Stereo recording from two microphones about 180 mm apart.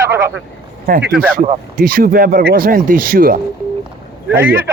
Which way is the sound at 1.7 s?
55° right (ahead or behind).